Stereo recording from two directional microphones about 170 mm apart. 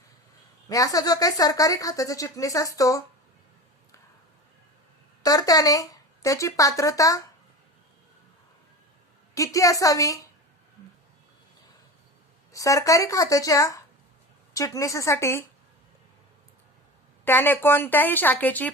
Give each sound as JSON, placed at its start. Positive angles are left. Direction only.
{"t": 0.7, "sound": "speech", "side_deg": 20}
{"t": 5.2, "sound": "speech", "side_deg": 20}
{"t": 9.3, "sound": "speech", "side_deg": 20}
{"t": 12.5, "sound": "speech", "side_deg": 20}
{"t": 17.2, "sound": "speech", "side_deg": 10}